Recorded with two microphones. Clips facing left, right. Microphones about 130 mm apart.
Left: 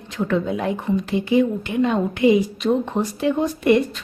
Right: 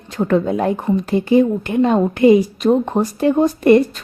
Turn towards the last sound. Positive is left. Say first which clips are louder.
# right 6 dB
turn(degrees=-40)  # may be behind; listen again after turning